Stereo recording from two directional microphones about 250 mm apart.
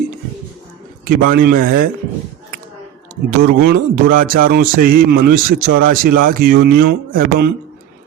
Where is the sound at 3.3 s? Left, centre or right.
Right.